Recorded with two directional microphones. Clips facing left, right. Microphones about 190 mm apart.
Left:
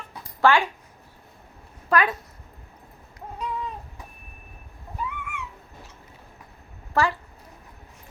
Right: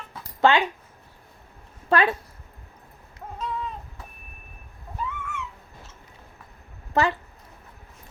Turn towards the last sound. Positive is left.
turn(degrees=-20)  # may be behind; listen again after turning